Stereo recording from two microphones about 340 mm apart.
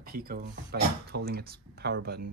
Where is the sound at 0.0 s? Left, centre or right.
Right.